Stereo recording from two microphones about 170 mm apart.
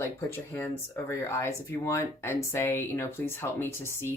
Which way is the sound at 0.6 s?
15° left (ahead or behind).